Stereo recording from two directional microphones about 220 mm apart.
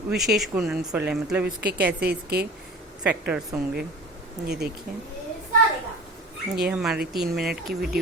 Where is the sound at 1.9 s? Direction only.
45° right (ahead or behind).